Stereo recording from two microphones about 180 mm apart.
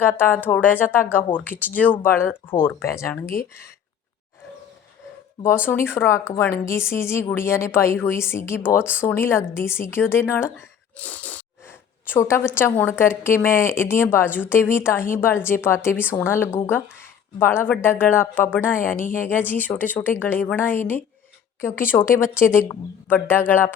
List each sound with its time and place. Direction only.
0.2 s a woman's voice: 10° left (ahead or behind)
5.4 s a woman's voice: 10° left (ahead or behind)
10.9 s sneeze: 10° left (ahead or behind)
12.0 s a woman's voice: 10° left (ahead or behind)